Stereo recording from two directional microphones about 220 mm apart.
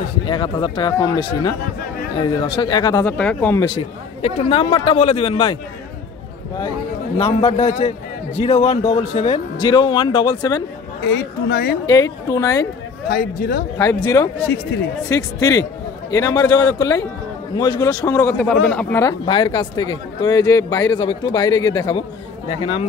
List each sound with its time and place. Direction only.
0.3 s speech: 20° left (ahead or behind)
4.2 s speech: 25° left (ahead or behind)
7.3 s speech: 25° left (ahead or behind)
11.1 s speech: 45° left (ahead or behind)
11.8 s speech: 15° left (ahead or behind)
13.1 s speech: 40° left (ahead or behind)
14.0 s speech: 15° left (ahead or behind)
18.4 s speech: 5° left (ahead or behind); by 22.8 s 25° left (ahead or behind)